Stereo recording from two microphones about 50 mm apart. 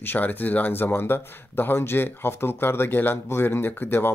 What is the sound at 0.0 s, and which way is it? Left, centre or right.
Speech, left.